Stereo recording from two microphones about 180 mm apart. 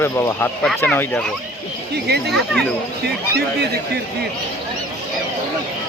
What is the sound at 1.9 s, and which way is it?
Speech, 65° right (ahead or behind).